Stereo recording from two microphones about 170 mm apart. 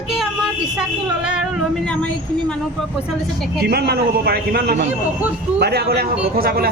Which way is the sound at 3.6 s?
70° right (ahead or behind).